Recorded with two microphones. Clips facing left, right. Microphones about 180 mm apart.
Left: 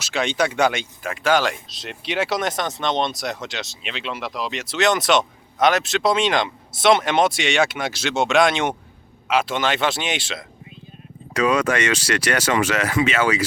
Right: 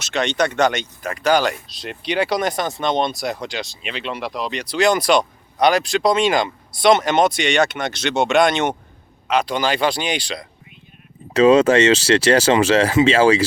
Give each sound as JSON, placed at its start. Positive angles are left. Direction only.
{"t": 0.0, "sound": "speech", "side_deg": 5}
{"t": 11.3, "sound": "speech", "side_deg": -25}